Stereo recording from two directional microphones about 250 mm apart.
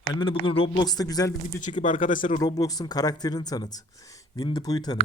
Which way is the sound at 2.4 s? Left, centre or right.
Centre.